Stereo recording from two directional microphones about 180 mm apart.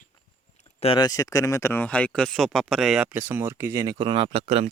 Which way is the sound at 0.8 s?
30° left (ahead or behind).